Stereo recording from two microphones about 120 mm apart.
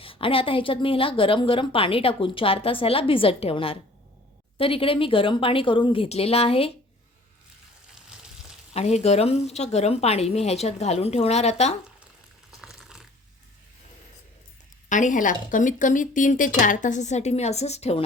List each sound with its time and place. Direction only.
0.0 s a woman's voice: 50° left (ahead or behind)
8.7 s a woman's voice: 65° left (ahead or behind)
12.5 s typing: centre (ahead or behind)
14.8 s speech: 90° left; by 18.0 s 60° left (ahead or behind)